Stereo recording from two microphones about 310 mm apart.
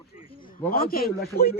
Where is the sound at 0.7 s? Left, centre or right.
Left.